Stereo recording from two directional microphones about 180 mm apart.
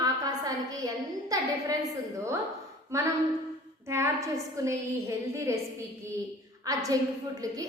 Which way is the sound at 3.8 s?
15° right (ahead or behind).